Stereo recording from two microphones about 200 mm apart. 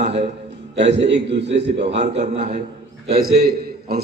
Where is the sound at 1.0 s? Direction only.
60° right (ahead or behind).